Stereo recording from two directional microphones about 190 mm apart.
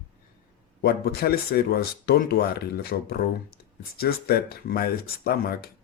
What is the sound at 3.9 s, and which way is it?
Speech, 50° left (ahead or behind).